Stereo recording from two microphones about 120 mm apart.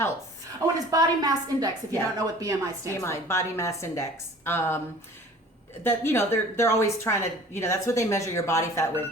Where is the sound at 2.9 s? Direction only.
25° left (ahead or behind).